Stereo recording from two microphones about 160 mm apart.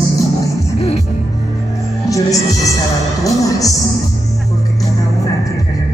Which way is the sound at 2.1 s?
20° left (ahead or behind).